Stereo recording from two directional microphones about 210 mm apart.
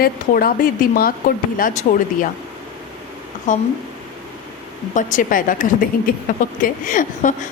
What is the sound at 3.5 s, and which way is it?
Speech, 35° left (ahead or behind).